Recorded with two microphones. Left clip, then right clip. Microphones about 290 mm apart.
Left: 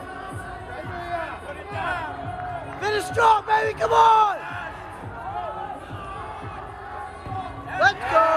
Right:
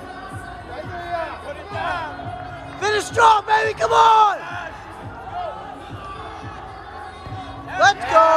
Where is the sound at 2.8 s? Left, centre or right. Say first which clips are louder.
Right 5 dB; right.